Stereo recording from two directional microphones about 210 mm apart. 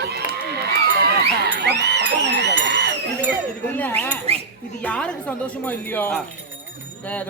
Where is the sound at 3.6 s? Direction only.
10° left (ahead or behind).